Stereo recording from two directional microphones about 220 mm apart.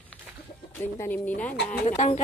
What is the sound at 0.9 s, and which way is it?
Speech, 10° left (ahead or behind).